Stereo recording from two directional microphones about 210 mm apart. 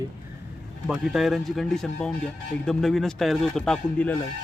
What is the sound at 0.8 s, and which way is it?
Speech, centre (ahead or behind).